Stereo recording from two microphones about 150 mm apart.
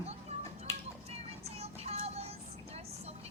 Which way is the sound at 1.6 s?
45° right (ahead or behind).